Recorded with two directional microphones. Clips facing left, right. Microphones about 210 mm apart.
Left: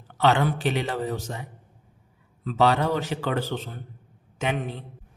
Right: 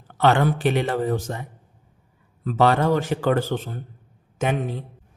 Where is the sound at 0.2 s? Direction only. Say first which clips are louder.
Right 3 dB; 50° right (ahead or behind).